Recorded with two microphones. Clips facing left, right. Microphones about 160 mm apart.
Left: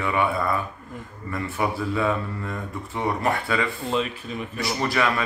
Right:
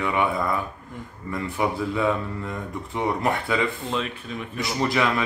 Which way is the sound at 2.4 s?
20° right (ahead or behind).